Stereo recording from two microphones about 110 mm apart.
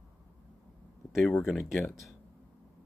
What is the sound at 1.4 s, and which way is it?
Speech, centre (ahead or behind).